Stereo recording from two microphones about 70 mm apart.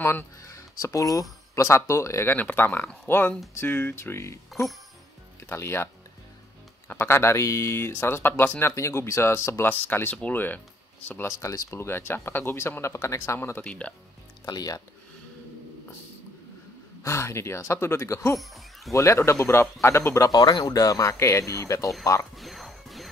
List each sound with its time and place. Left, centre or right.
0.0 s speech: left
0.4 s speech: left
1.5 s speech: left
2.3 s speech: left
5.4 s speech: left
7.0 s speech: left
11.4 s speech: left
13.6 s speech: centre
14.4 s speech: left
17.0 s speech: left
18.4 s speech: centre
18.9 s speech: left
20.2 s speech: left
22.3 s music: centre